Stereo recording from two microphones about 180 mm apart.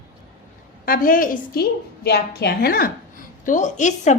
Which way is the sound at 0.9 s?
50° left (ahead or behind).